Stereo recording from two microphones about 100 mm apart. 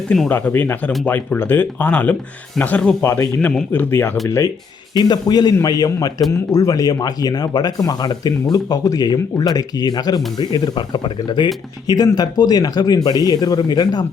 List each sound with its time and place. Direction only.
0.1 s speech: 5° left (ahead or behind)
0.5 s speech: 20° left (ahead or behind)
3.0 s speech: 30° left (ahead or behind)
4.9 s speech: 45° left (ahead or behind)